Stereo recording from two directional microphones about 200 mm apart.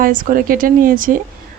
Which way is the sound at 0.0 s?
45° right (ahead or behind).